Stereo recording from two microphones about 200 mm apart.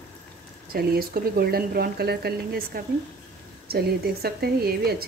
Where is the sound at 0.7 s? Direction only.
50° right (ahead or behind).